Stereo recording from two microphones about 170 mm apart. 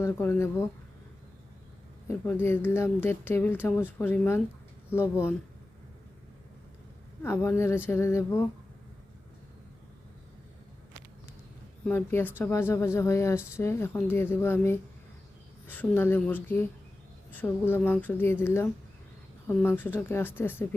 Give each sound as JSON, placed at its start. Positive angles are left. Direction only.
{"t": 0.0, "sound": "speech", "side_deg": 15}
{"t": 2.0, "sound": "speech", "side_deg": 15}
{"t": 7.2, "sound": "speech", "side_deg": 15}
{"t": 11.9, "sound": "speech", "side_deg": 10}